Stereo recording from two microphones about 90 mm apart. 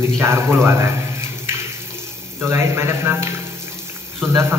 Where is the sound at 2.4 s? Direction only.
30° right (ahead or behind).